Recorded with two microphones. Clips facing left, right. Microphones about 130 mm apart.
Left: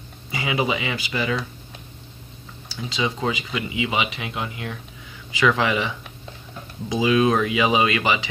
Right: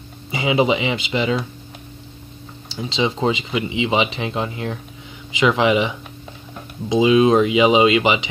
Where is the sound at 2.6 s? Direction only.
25° right (ahead or behind).